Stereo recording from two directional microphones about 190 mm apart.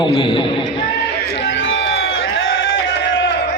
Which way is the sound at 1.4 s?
75° left (ahead or behind).